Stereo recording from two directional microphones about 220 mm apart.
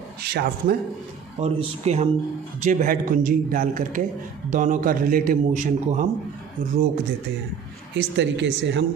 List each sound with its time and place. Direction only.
0.2 s speech: 45° right (ahead or behind)
1.4 s a man's voice: 30° right (ahead or behind)
7.9 s a woman's voice: 55° right (ahead or behind)